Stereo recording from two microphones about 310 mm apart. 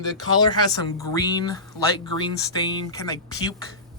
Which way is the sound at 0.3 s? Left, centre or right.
Centre.